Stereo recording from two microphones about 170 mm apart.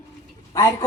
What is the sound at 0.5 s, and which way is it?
Speech, 20° left (ahead or behind).